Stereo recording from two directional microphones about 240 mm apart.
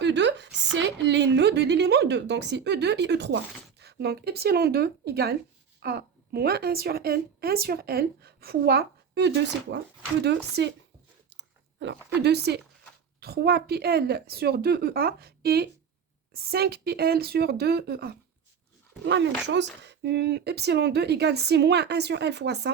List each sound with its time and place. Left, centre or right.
0.0 s a woman's voice: right